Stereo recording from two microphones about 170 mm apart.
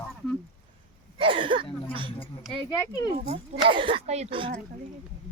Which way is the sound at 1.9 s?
30° right (ahead or behind).